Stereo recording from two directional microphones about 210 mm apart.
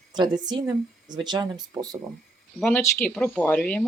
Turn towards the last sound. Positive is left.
turn(degrees=5)  # may be behind; listen again after turning